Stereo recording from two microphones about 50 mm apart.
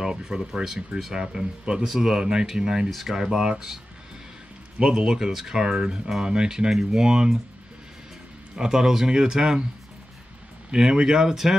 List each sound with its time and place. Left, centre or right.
0.0 s speech: centre
2.9 s speech: centre
3.2 s speech: centre
8.5 s speech: centre
10.7 s speech: centre